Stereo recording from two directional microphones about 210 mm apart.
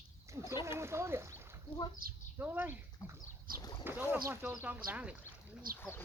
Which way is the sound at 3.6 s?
20° left (ahead or behind).